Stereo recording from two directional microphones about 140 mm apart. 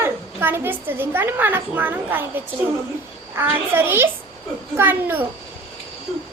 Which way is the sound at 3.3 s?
15° right (ahead or behind).